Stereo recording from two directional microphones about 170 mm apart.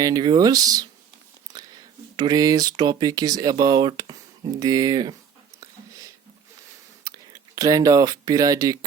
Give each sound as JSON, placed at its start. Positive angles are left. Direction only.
{"t": 0.0, "sound": "speech", "side_deg": -25}
{"t": 5.5, "sound": "a sound", "side_deg": -20}
{"t": 7.0, "sound": "speech", "side_deg": -20}